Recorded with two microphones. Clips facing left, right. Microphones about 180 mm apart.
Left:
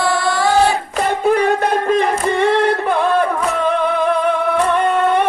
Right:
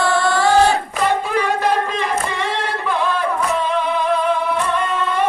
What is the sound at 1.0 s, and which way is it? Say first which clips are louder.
Singing: left 5 dB; 55° left (ahead or behind).